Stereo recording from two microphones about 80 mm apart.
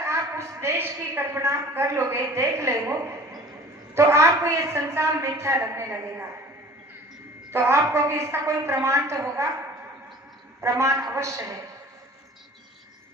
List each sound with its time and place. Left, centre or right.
0.0 s a woman's voice: right
3.9 s a woman's voice: right
7.5 s a woman's voice: right
10.6 s a woman's voice: right